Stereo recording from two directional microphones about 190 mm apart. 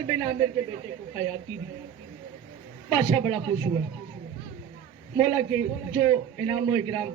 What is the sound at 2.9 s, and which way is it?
Speech, 20° right (ahead or behind).